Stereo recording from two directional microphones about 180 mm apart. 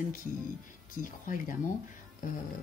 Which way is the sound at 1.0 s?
45° left (ahead or behind).